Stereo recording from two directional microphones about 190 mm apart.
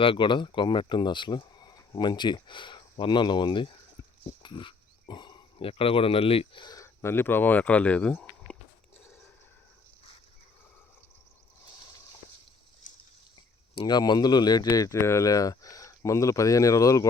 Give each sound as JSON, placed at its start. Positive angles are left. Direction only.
{"t": 0.0, "sound": "speech", "side_deg": 25}
{"t": 12.8, "sound": "a sound", "side_deg": 45}
{"t": 13.7, "sound": "speech", "side_deg": 20}